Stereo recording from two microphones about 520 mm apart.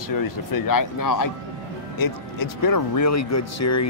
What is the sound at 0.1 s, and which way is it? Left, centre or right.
Speech, left.